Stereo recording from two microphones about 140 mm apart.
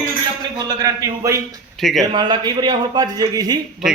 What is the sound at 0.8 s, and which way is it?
Speech, 25° right (ahead or behind).